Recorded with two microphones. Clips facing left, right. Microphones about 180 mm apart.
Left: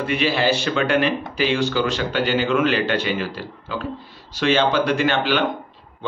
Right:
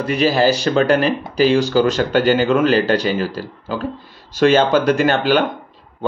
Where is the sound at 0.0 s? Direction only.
40° right (ahead or behind).